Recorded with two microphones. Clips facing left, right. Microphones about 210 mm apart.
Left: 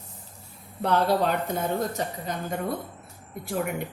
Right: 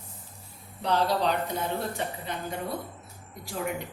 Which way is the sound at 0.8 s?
55° left (ahead or behind).